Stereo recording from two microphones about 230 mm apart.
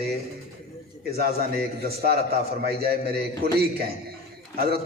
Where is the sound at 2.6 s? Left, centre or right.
Right.